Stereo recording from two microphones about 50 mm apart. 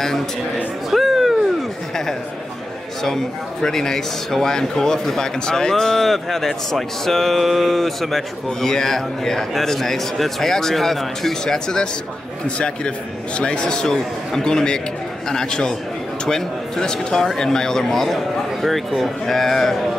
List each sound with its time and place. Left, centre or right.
0.8 s music: centre
3.0 s a man's voice: centre